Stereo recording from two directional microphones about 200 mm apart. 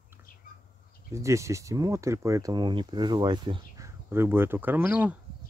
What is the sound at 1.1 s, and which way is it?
Speech, 15° right (ahead or behind).